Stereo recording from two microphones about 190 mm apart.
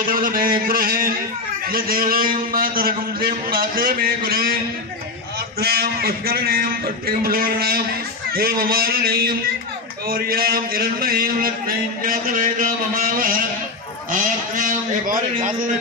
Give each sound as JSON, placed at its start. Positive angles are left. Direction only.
{"t": 0.0, "sound": "a man's voice", "side_deg": -50}
{"t": 5.6, "sound": "a man's voice", "side_deg": -55}